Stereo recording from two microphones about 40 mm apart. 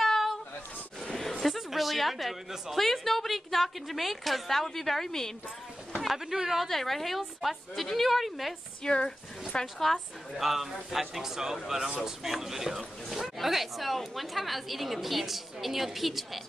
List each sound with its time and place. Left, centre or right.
0.0 s a sound: centre
1.4 s speech: centre
6.0 s a man's voice: centre
6.7 s speech: centre
8.8 s speech: left
9.8 s speech: centre
10.3 s a man's voice: centre